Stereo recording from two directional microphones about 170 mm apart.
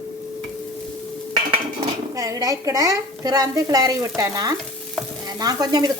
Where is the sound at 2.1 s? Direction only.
20° right (ahead or behind).